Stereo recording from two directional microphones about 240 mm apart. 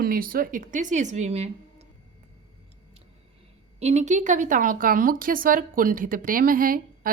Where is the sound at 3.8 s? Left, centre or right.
Right.